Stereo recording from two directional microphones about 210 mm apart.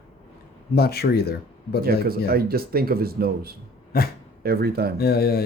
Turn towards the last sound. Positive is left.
turn(degrees=50)  # may be behind; listen again after turning